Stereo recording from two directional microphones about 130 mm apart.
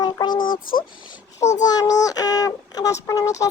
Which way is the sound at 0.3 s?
90° left.